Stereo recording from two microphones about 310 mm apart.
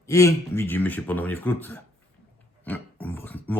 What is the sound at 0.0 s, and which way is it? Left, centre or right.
Speech, centre.